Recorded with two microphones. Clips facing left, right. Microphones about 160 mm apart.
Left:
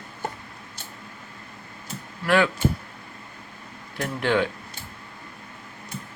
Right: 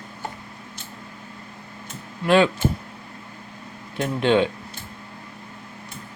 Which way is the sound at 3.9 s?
20° right (ahead or behind).